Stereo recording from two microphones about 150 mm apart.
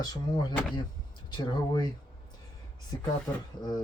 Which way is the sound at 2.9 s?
25° left (ahead or behind).